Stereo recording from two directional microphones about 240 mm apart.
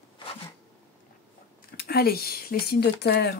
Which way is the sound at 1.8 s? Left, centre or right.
Left.